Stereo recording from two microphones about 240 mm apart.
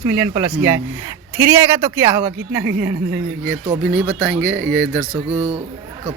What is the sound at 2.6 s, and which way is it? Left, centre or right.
Speech, right.